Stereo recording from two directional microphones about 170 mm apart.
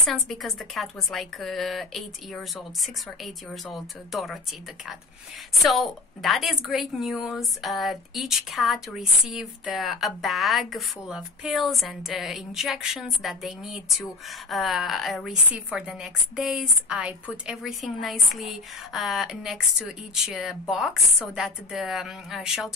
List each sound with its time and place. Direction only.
0.0 s a woman's voice: centre (ahead or behind)
5.5 s a woman's voice: centre (ahead or behind)